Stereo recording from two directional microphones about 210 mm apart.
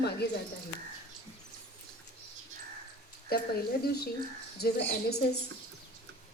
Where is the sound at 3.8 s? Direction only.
45° left (ahead or behind).